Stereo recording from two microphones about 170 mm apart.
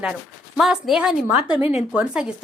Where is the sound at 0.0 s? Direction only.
5° right (ahead or behind).